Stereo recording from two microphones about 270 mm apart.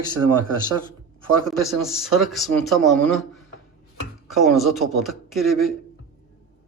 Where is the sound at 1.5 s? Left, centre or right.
Centre.